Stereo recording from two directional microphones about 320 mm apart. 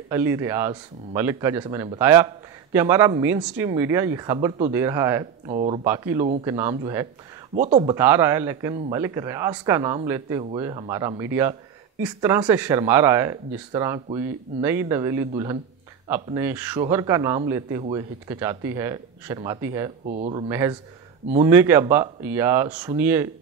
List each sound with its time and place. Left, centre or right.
0.1 s speech: centre
5.5 s speech: centre